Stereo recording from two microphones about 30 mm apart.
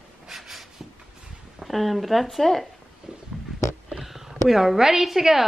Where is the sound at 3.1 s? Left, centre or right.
Right.